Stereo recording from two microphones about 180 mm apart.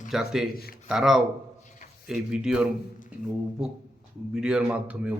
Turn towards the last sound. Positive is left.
turn(degrees=-10)  # may be behind; listen again after turning